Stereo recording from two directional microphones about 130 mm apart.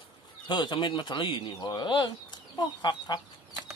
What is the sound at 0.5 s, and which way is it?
Speech, 35° left (ahead or behind).